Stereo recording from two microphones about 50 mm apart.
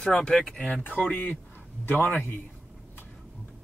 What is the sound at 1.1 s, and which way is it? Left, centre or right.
A man's voice, left.